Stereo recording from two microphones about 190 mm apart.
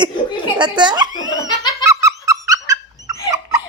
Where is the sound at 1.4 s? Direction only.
20° left (ahead or behind).